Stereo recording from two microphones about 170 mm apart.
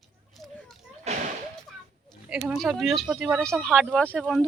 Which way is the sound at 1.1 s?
40° right (ahead or behind).